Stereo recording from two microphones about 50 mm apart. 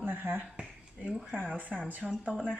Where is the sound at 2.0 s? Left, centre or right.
Centre.